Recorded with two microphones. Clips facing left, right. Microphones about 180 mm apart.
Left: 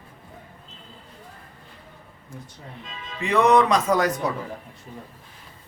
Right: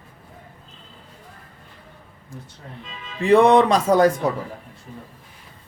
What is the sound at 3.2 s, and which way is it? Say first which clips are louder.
Speech: right 4 dB; 30° right (ahead or behind).